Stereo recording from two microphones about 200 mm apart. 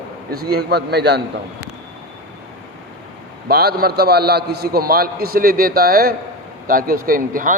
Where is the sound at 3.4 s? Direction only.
50° right (ahead or behind).